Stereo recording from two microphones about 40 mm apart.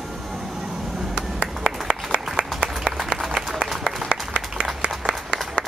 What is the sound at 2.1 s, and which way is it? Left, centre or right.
Applause, right.